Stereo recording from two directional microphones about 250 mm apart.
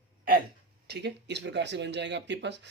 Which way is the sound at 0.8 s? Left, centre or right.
Right.